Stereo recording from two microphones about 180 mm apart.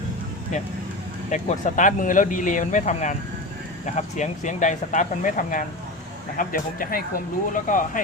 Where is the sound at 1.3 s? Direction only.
45° left (ahead or behind).